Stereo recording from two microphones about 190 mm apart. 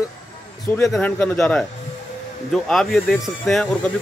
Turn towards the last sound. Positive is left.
turn(degrees=5)  # may be behind; listen again after turning